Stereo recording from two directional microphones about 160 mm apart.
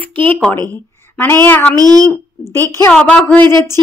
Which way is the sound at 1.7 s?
25° right (ahead or behind).